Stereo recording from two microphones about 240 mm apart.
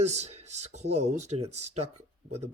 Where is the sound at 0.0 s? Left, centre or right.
Right.